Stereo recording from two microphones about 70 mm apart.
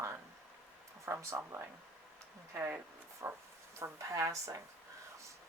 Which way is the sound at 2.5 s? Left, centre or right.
Right.